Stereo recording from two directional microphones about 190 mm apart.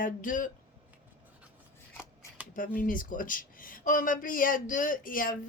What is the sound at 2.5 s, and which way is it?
Speech, 45° left (ahead or behind).